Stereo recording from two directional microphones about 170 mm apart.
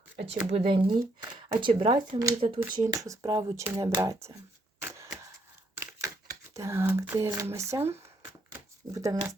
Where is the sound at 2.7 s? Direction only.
20° right (ahead or behind).